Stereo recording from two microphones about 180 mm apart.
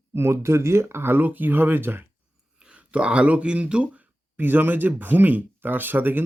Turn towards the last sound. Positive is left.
turn(degrees=-10)  # may be behind; listen again after turning